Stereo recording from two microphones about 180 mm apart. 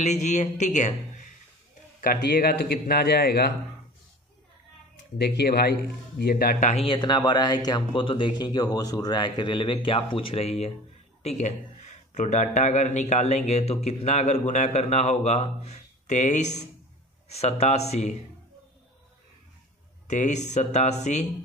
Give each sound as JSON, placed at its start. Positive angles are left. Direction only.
{"t": 0.0, "sound": "a man's voice", "side_deg": 40}
{"t": 5.1, "sound": "a man's voice", "side_deg": 65}
{"t": 6.7, "sound": "a man's voice", "side_deg": 30}
{"t": 20.1, "sound": "a man's voice", "side_deg": 40}